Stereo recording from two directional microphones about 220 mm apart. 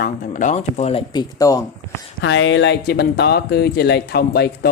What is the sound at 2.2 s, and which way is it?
Speech, 55° left (ahead or behind).